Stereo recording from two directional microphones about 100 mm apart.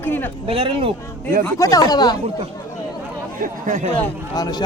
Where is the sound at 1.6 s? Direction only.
35° left (ahead or behind).